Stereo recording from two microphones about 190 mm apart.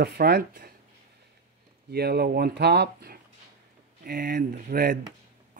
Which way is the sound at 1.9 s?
55° right (ahead or behind).